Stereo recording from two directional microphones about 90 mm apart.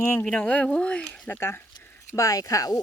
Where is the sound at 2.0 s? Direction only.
35° left (ahead or behind).